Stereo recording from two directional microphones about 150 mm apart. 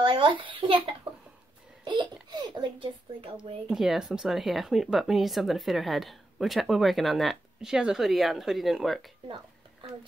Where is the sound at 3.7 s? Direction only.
Centre (ahead or behind).